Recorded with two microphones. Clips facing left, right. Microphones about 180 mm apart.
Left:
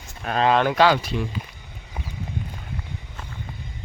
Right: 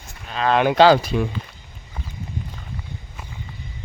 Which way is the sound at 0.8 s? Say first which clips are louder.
Right 5 dB; 35° right (ahead or behind).